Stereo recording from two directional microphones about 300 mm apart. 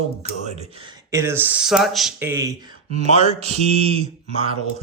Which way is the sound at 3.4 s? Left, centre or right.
Right.